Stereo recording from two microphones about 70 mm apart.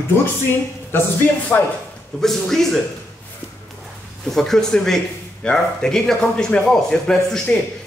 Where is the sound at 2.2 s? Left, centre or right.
Centre.